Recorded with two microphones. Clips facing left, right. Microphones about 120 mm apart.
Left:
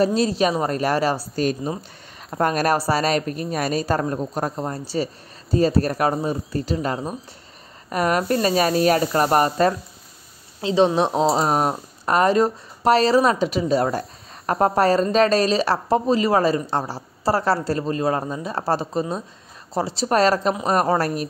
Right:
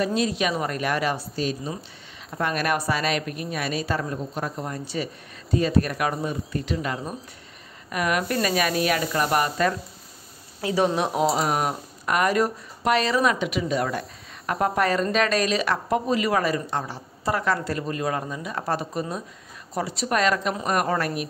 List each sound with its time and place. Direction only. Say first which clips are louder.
0.0 s speech: left 5 dB; 35° left (ahead or behind)
1.4 s a woman's voice: left 7 dB; 50° left (ahead or behind)
10.6 s speech: left 5 dB; 25° left (ahead or behind)